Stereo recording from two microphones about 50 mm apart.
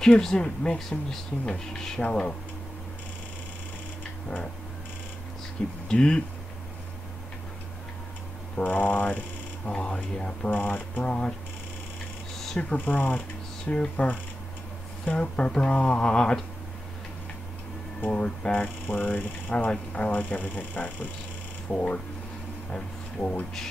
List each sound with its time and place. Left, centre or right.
0.2 s speech: centre
5.9 s speech: centre
8.6 s speech: left
9.7 s speech: left
10.5 s speech: left
11.1 s speech: centre
12.7 s speech: left
15.1 s speech: left
18.1 s speech: centre
18.5 s speech: left
19.5 s speech: left
21.6 s speech: left
22.7 s a sound: left